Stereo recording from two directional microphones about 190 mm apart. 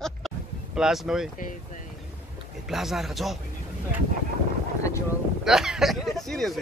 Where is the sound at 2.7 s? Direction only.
Centre (ahead or behind).